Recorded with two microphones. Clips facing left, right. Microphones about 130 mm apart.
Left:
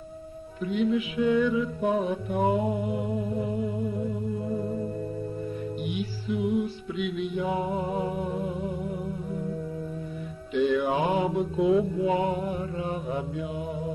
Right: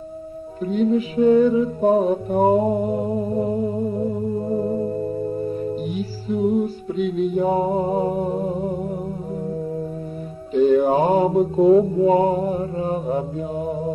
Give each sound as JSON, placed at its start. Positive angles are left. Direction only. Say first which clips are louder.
{"t": 0.7, "sound": "mantra", "louder": "right 6 dB", "side_deg": -40}
{"t": 10.5, "sound": "mantra", "louder": "right 8 dB", "side_deg": -40}